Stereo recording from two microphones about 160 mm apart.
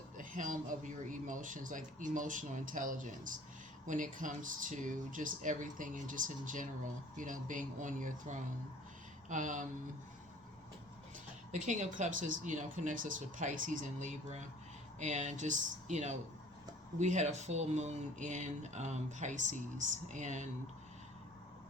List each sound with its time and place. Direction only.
0.2 s speech: 55° right (ahead or behind)
11.5 s speech: 50° right (ahead or behind)